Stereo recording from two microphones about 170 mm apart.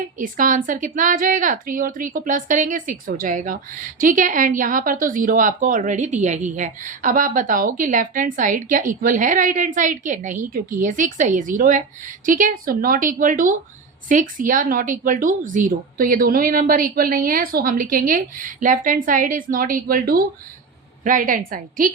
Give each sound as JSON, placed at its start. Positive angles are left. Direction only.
{"t": 0.2, "sound": "a woman's voice", "side_deg": -50}